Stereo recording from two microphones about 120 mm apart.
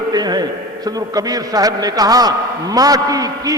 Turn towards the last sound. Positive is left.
turn(degrees=-30)  # may be behind; listen again after turning